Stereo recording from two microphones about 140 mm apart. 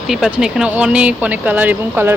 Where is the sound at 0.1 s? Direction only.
5° right (ahead or behind).